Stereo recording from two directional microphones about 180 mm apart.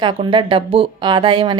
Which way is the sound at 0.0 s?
25° right (ahead or behind).